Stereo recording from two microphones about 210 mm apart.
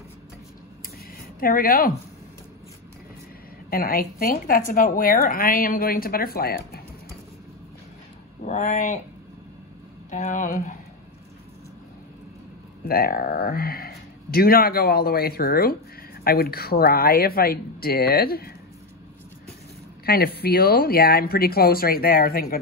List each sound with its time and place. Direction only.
1.4 s a woman's voice: 45° left (ahead or behind)
3.7 s a woman's voice: 45° left (ahead or behind)
8.4 s speech: 35° left (ahead or behind)
10.1 s speech: 35° left (ahead or behind)
12.8 s a woman's voice: 45° left (ahead or behind)
20.1 s a woman's voice: 50° left (ahead or behind)